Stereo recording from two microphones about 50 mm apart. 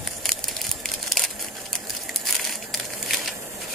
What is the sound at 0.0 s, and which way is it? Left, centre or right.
Crushing, centre.